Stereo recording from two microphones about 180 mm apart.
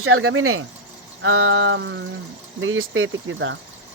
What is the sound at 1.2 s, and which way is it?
Speech, 90° right.